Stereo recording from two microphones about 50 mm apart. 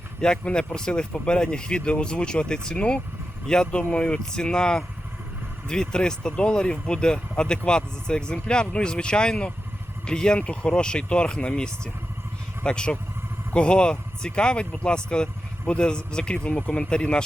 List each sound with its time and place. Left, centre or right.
0.2 s speech: centre